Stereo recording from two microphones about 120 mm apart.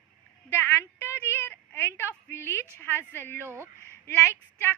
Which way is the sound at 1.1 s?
20° left (ahead or behind).